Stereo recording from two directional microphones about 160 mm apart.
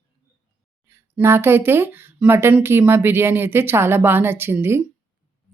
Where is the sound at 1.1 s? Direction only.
15° right (ahead or behind).